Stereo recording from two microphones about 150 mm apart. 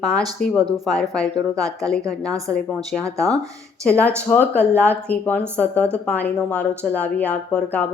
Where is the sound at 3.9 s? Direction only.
10° left (ahead or behind).